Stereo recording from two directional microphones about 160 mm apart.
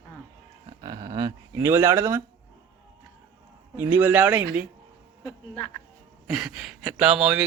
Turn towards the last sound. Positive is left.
turn(degrees=-5)  # may be behind; listen again after turning